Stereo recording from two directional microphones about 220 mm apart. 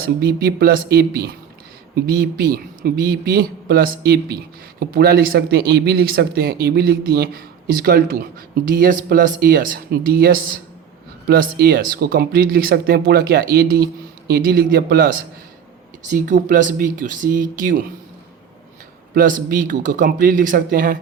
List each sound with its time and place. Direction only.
0.0 s speech: 45° right (ahead or behind)
19.1 s speech: 40° right (ahead or behind)